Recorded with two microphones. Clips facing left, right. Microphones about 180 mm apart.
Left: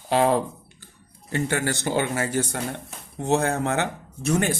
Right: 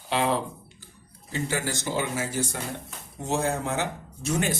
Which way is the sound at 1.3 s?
60° left (ahead or behind).